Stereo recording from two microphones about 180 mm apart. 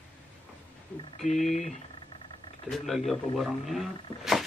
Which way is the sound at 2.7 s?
Centre (ahead or behind).